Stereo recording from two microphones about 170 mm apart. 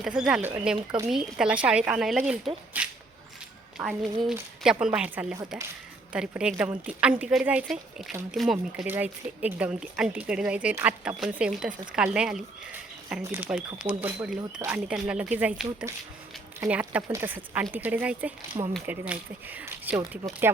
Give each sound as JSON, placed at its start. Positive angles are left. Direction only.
{"t": 0.0, "sound": "speech", "side_deg": -5}
{"t": 18.5, "sound": "speech", "side_deg": -30}
{"t": 18.9, "sound": "speech", "side_deg": -10}